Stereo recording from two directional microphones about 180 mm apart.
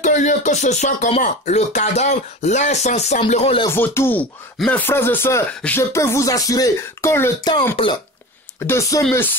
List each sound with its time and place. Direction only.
0.0 s speech: 40° left (ahead or behind)
3.7 s speech: 10° left (ahead or behind)
8.5 s speech: 15° left (ahead or behind)